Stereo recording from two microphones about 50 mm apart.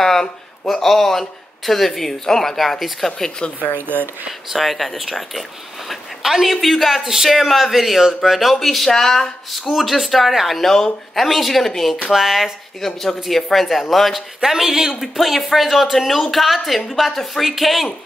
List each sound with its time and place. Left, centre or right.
0.0 s a man's voice: centre
3.2 s speech: centre
3.7 s speech: right
4.3 s a man's voice: centre
14.4 s a man's voice: centre